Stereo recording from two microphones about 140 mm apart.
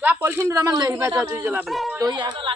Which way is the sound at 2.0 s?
30° right (ahead or behind).